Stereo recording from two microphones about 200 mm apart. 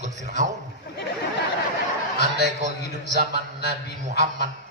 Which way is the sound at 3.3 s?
55° left (ahead or behind).